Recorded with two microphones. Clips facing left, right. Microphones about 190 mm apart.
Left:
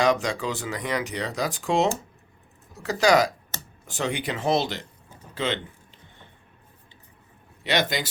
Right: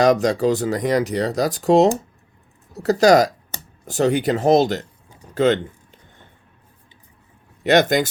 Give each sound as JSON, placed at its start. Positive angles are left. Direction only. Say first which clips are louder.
{"t": 0.0, "sound": "speech", "louder": "right 7 dB", "side_deg": -40}
{"t": 5.3, "sound": "a sound", "louder": "right 11 dB", "side_deg": -45}
{"t": 7.6, "sound": "speech", "louder": "right 10 dB", "side_deg": -50}